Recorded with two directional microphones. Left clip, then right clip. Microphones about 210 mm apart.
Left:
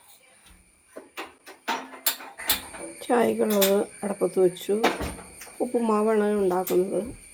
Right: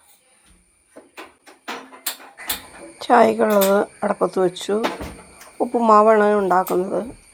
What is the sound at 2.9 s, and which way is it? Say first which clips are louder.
Speech: right 9 dB; 15° right (ahead or behind).